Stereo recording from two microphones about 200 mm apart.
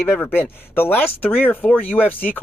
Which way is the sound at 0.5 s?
10° left (ahead or behind).